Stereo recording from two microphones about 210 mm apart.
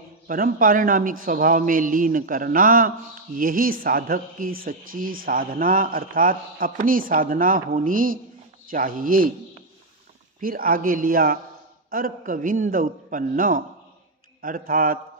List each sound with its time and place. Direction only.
0.3 s speech: 40° right (ahead or behind)
10.4 s a man's voice: 45° right (ahead or behind)